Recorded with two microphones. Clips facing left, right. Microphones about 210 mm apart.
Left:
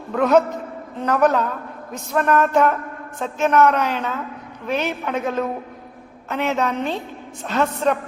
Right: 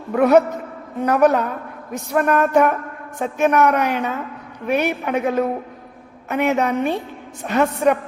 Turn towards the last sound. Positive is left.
turn(degrees=-15)  # may be behind; listen again after turning